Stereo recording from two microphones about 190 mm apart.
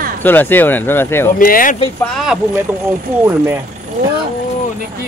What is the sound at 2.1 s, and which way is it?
Speech, 5° right (ahead or behind).